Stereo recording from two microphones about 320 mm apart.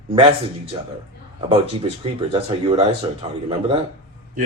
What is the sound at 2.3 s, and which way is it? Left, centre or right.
Speech, centre.